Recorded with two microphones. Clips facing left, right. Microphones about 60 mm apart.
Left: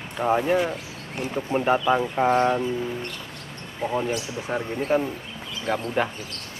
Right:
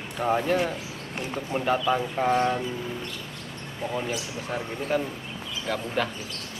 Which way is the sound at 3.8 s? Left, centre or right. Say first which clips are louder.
Left 4 dB; left.